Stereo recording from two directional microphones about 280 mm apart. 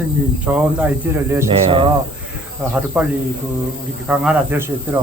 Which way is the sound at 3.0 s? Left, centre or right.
Centre.